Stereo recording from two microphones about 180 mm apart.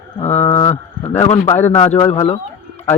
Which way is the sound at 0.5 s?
35° left (ahead or behind).